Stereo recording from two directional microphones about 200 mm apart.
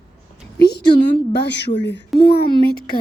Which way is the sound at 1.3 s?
60° left (ahead or behind).